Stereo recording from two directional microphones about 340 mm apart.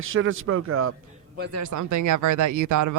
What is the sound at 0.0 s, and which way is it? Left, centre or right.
Speech, right.